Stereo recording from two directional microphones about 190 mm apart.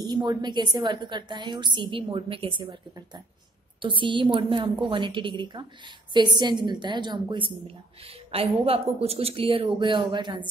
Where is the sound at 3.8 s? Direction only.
25° right (ahead or behind).